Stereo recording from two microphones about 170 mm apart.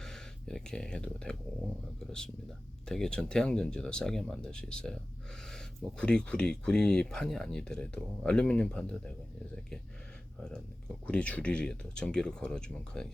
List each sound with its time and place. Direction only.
0.0 s a sound: 5° left (ahead or behind)
2.9 s speech: 5° left (ahead or behind)
6.0 s speech: 5° left (ahead or behind)
11.0 s speech: 5° left (ahead or behind)